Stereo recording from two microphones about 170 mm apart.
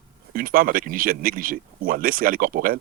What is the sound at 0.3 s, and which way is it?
Speech, 55° right (ahead or behind).